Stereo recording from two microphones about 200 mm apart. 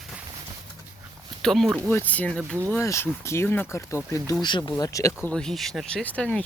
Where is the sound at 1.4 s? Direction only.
Centre (ahead or behind).